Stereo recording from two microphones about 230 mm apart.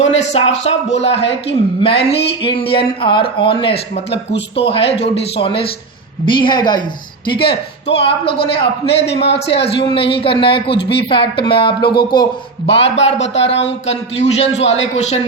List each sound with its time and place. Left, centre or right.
0.0 s a sound: left
0.6 s speech: left
10.5 s speech: left
11.1 s speech: left